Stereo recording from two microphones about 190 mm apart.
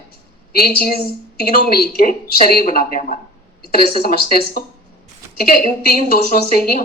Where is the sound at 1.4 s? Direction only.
55° left (ahead or behind).